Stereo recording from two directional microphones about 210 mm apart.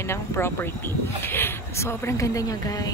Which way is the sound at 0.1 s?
10° left (ahead or behind).